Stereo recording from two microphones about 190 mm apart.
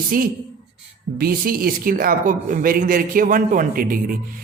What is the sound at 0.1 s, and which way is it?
A man's voice, 50° right (ahead or behind).